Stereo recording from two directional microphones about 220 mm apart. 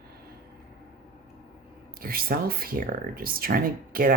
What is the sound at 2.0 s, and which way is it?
Speech, 40° right (ahead or behind).